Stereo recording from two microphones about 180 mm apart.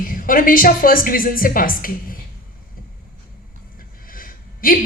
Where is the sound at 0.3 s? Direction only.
50° left (ahead or behind).